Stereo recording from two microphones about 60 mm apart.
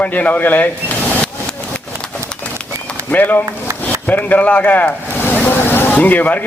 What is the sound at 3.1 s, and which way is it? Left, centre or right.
Speech, left.